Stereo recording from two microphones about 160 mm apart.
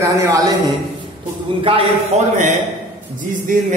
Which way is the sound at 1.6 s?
35° right (ahead or behind).